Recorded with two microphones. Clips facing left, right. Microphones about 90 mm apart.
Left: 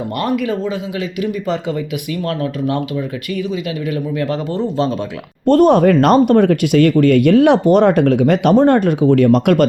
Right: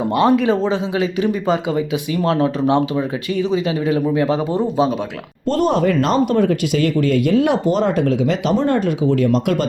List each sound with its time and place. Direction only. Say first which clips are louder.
0.2 s speech: right 4 dB; 25° right (ahead or behind)
5.5 s speech: left 6 dB; 55° left (ahead or behind)